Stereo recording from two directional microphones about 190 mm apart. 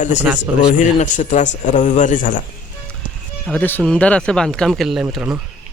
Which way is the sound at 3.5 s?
10° left (ahead or behind).